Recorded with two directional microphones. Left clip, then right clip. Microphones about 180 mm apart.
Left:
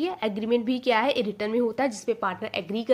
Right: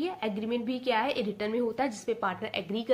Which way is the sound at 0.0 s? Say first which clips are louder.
Left 4 dB; 45° left (ahead or behind).